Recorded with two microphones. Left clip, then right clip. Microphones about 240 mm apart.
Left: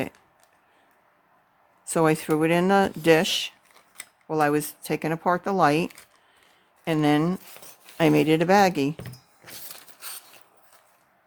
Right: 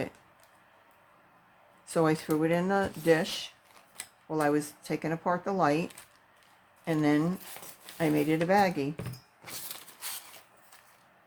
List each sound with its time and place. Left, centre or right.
1.9 s speech: left